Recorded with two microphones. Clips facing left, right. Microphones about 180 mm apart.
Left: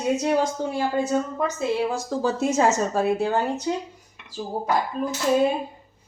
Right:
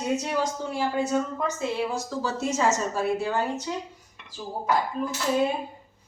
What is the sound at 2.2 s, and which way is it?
Speech, 60° left (ahead or behind).